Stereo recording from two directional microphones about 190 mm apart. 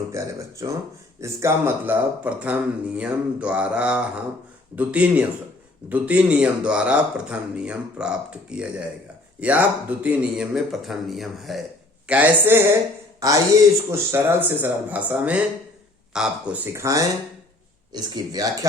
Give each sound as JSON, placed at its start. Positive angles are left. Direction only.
{"t": 0.1, "sound": "speech", "side_deg": -15}
{"t": 16.7, "sound": "speech", "side_deg": -15}